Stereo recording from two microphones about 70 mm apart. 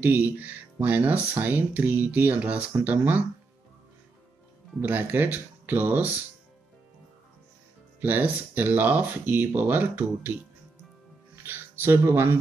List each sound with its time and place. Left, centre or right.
0.0 s speech: right
4.8 s speech: right
8.0 s speech: right
11.4 s music: right